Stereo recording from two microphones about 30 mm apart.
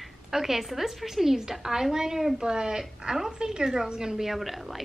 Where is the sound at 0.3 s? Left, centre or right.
Centre.